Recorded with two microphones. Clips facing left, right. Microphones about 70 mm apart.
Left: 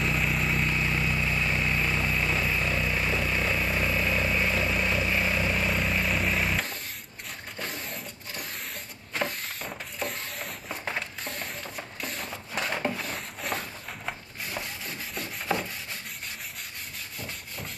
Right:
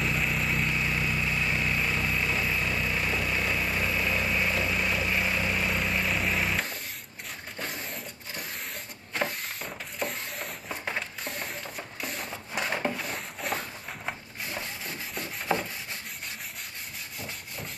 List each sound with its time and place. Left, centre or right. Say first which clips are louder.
0.0 s vehicle: left 1 dB; centre
9.9 s a sound: right 1 dB; centre
15.5 s rub: right 1 dB; right